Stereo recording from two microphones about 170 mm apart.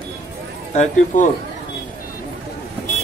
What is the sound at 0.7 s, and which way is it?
Speech, 45° left (ahead or behind).